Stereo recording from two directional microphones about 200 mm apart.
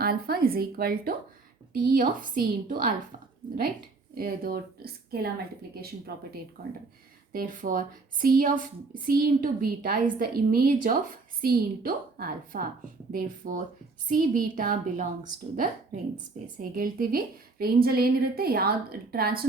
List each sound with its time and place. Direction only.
0.0 s a woman's voice: 50° right (ahead or behind)
4.2 s a woman's voice: 45° right (ahead or behind)
6.6 s a woman's voice: 45° right (ahead or behind)
16.6 s a woman's voice: 45° right (ahead or behind)